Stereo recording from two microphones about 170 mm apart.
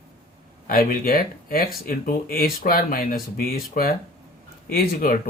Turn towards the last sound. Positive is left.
turn(degrees=60)  # may be behind; listen again after turning